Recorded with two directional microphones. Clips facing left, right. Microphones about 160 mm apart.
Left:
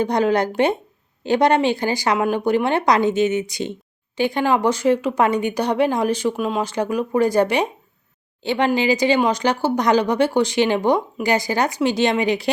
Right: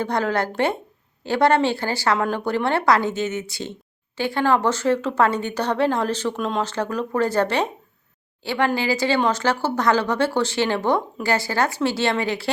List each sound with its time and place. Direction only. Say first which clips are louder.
0.0 s speech: left 4 dB; 15° left (ahead or behind)